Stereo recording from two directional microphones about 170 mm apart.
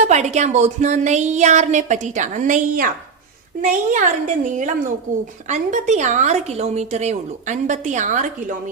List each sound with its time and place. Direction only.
0.0 s a woman's voice: 40° right (ahead or behind)